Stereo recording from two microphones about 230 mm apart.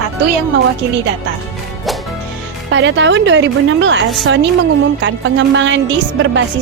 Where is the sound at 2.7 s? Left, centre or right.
Right.